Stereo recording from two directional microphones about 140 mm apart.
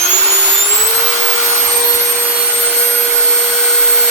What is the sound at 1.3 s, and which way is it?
Vacuum cleaner, 20° right (ahead or behind).